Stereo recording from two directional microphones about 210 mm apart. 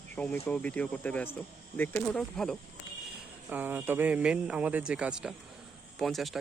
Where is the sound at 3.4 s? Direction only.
10° right (ahead or behind).